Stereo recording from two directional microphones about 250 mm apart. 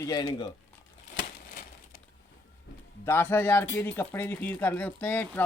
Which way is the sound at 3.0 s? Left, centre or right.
Centre.